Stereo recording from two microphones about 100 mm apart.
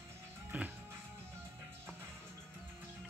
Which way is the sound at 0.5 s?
15° right (ahead or behind).